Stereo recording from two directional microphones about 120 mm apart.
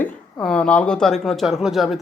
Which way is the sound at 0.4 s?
10° left (ahead or behind).